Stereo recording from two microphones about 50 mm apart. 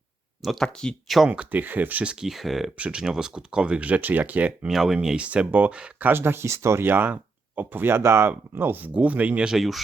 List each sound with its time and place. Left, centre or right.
0.4 s speech: centre
1.0 s speech: centre
1.3 s speech: right
2.2 s speech: centre
2.7 s speech: right
3.0 s speech: centre; by 4.5 s right
4.7 s speech: centre
5.1 s speech: right
6.0 s speech: right
6.8 s speech: right
8.0 s speech: right
8.5 s speech: right
8.9 s speech: right
9.4 s speech: centre